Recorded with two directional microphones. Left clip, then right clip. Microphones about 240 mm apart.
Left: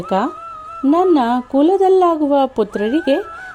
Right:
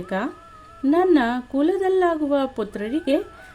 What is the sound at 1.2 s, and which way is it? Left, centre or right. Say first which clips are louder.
Speech: left 7 dB; centre.